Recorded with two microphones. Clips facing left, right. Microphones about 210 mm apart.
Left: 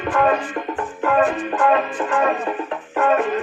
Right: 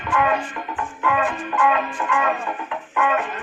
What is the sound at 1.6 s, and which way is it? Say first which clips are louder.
Music: left 2 dB; 40° left (ahead or behind).